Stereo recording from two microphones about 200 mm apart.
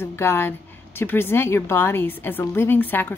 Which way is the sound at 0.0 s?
10° left (ahead or behind).